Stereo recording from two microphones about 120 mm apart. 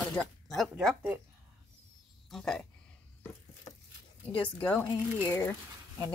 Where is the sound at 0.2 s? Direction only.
Centre (ahead or behind).